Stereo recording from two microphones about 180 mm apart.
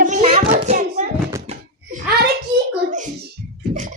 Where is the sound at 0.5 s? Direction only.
40° right (ahead or behind).